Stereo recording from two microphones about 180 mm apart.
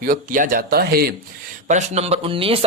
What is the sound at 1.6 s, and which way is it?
Speech, 40° right (ahead or behind).